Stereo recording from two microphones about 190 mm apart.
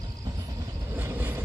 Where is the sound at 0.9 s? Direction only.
10° right (ahead or behind).